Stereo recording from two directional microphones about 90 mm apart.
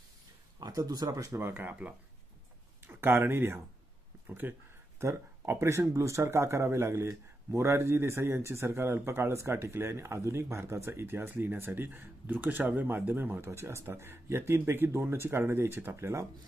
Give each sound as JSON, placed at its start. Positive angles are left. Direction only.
{"t": 0.6, "sound": "speech", "side_deg": -45}
{"t": 1.5, "sound": "speech", "side_deg": -20}